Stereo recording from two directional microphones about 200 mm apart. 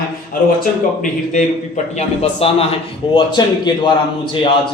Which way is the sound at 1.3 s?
35° left (ahead or behind).